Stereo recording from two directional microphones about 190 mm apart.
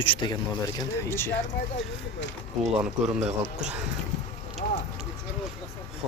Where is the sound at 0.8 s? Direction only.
15° left (ahead or behind).